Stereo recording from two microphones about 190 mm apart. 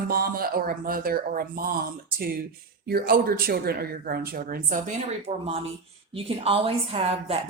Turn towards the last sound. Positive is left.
turn(degrees=-30)  # may be behind; listen again after turning